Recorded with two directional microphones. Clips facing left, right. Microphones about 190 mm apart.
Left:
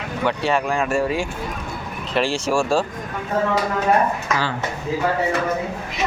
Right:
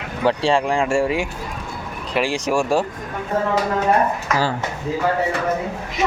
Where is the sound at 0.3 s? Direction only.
30° right (ahead or behind).